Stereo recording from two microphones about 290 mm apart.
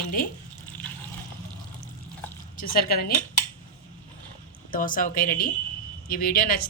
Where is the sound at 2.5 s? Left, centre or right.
Left.